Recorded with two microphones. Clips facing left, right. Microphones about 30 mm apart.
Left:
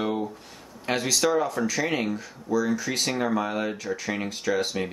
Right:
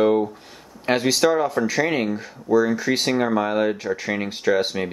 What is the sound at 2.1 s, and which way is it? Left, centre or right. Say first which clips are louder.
Speech: right 7 dB; right.